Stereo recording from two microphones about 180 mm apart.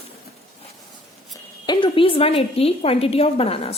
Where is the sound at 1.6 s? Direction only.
30° left (ahead or behind).